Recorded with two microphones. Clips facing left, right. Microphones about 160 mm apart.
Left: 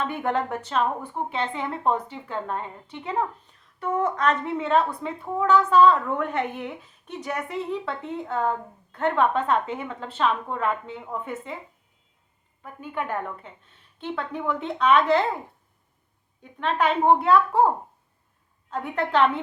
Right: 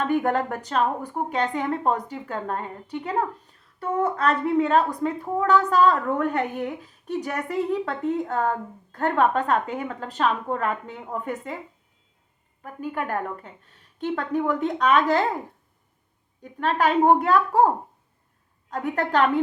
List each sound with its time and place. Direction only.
0.0 s a woman's voice: 40° right (ahead or behind)
12.6 s a woman's voice: 40° right (ahead or behind)
16.4 s a woman's voice: 40° right (ahead or behind)
18.7 s a woman's voice: 40° right (ahead or behind)